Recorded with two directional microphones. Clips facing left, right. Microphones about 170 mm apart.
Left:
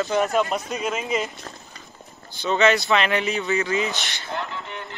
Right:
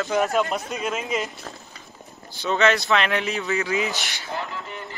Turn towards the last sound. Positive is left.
turn(degrees=-5)  # may be behind; listen again after turning